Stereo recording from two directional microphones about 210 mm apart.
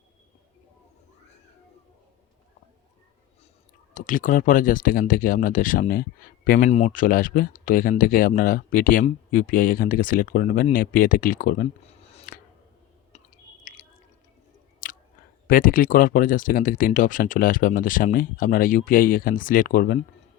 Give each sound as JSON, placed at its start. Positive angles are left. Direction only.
{"t": 3.9, "sound": "speech", "side_deg": 40}
{"t": 15.4, "sound": "speech", "side_deg": 40}